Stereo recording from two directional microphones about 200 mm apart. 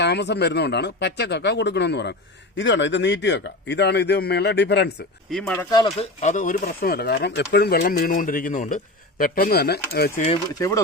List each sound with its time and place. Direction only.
0.0 s a man's voice: 60° left (ahead or behind)
5.3 s speech: 5° left (ahead or behind)
5.7 s speech: 25° left (ahead or behind); by 10.1 s 50° left (ahead or behind)
10.6 s speech: 15° left (ahead or behind)